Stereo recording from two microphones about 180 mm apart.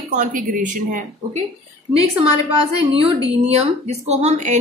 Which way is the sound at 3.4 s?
35° right (ahead or behind).